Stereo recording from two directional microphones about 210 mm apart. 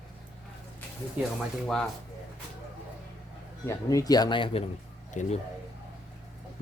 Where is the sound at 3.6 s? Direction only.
15° left (ahead or behind); by 5.3 s 35° left (ahead or behind).